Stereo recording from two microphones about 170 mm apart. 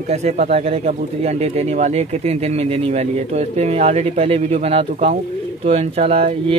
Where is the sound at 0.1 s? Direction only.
40° right (ahead or behind).